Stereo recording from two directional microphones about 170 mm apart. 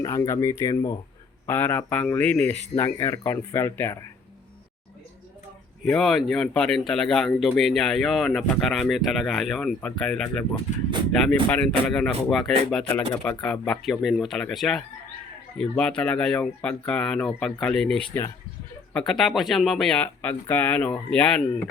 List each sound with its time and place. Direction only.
0.0 s speech: 20° left (ahead or behind)
5.8 s speech: centre (ahead or behind)